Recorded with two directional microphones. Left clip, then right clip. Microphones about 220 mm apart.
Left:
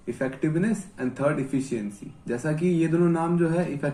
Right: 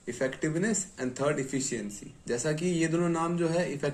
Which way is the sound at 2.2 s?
30° right (ahead or behind).